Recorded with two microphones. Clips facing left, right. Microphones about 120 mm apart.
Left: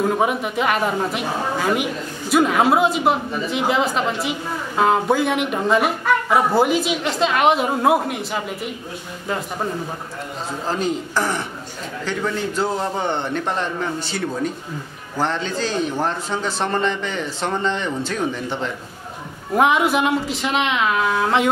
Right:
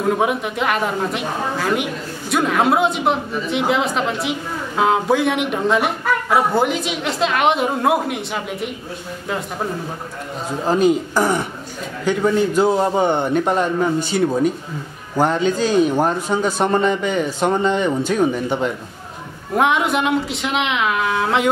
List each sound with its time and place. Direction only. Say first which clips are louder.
0.0 s a woman's voice: right 1 dB; centre (ahead or behind)
10.7 s a man's voice: right 7 dB; 10° right (ahead or behind)
19.5 s a woman's voice: left 1 dB; centre (ahead or behind)